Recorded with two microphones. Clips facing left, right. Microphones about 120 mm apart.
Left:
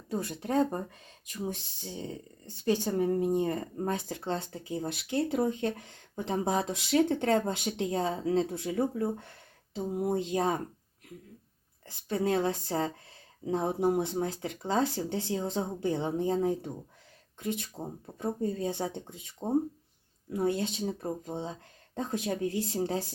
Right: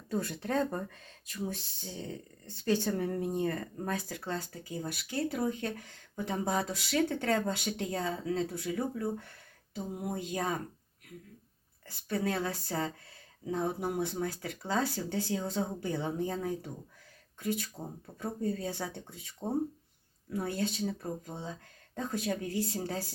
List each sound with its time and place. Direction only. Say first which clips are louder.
0.1 s speech: left 2 dB; 15° left (ahead or behind)
11.9 s speech: left 4 dB; 20° left (ahead or behind)